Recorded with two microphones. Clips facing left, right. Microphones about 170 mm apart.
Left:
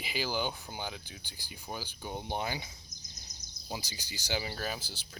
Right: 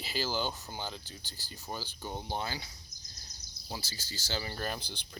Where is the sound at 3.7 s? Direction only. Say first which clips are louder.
Left 1 dB; 15° left (ahead or behind).